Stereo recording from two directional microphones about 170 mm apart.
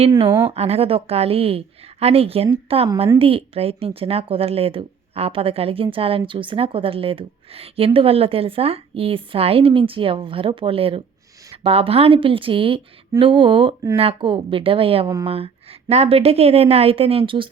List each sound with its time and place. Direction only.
0.4 s speech: 35° right (ahead or behind)